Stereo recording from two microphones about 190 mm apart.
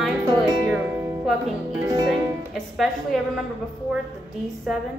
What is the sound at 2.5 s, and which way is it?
Speech, centre (ahead or behind).